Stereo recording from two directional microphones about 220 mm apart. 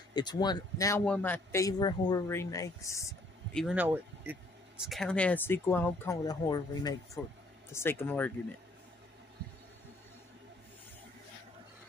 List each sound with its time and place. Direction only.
0.1 s a man's voice: 20° left (ahead or behind)
3.5 s a man's voice: 5° right (ahead or behind)